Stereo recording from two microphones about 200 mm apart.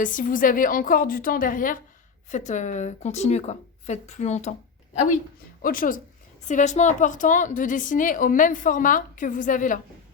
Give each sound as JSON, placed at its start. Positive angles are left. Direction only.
{"t": 0.0, "sound": "a woman's voice", "side_deg": 40}
{"t": 5.6, "sound": "a woman's voice", "side_deg": 45}